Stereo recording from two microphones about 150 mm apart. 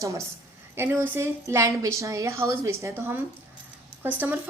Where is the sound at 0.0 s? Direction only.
20° right (ahead or behind).